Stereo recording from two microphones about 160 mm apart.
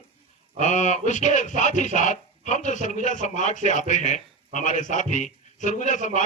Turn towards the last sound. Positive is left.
turn(degrees=50)  # may be behind; listen again after turning